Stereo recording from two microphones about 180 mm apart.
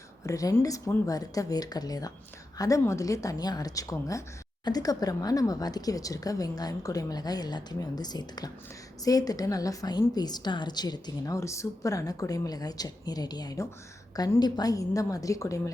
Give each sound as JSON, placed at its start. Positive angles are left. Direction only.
{"t": 0.3, "sound": "a woman's voice", "side_deg": 20}